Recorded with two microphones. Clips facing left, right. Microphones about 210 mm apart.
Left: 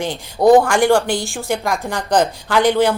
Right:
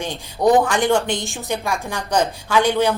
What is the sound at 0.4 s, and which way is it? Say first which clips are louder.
Speech: left 5 dB; 35° left (ahead or behind).